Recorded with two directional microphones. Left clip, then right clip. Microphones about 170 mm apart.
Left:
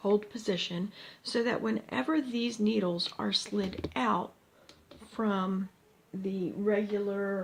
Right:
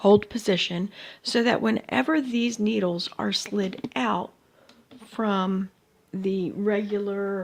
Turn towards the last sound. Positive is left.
turn(degrees=-65)  # may be behind; listen again after turning